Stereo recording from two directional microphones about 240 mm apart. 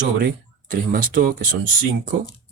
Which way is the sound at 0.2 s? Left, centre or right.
Right.